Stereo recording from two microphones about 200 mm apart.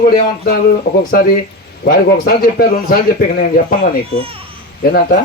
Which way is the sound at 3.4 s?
45° left (ahead or behind).